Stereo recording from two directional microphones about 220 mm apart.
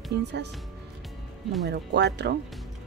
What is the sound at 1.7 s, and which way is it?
Speech, 50° right (ahead or behind).